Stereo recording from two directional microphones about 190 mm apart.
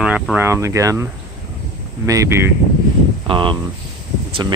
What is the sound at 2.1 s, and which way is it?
Speech, 15° right (ahead or behind).